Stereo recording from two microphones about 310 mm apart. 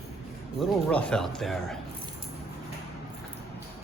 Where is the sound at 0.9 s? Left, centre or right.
Centre.